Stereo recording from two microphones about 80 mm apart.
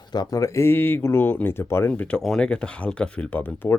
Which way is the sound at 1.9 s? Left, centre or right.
Centre.